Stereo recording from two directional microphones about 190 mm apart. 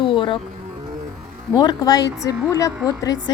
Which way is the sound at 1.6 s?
20° left (ahead or behind).